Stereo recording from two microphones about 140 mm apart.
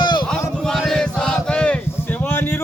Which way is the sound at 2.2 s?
15° left (ahead or behind).